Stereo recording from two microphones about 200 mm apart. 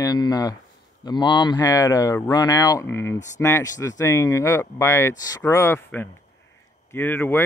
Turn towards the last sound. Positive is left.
turn(degrees=10)  # may be behind; listen again after turning